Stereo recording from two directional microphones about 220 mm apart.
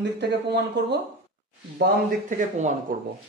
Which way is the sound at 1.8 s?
35° right (ahead or behind).